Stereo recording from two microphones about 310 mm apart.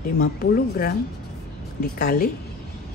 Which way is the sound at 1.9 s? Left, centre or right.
Left.